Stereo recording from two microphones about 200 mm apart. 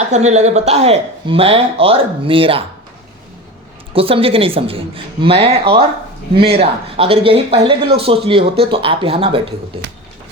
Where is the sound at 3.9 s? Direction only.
30° right (ahead or behind).